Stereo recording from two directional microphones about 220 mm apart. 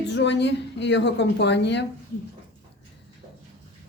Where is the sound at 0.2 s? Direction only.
50° left (ahead or behind).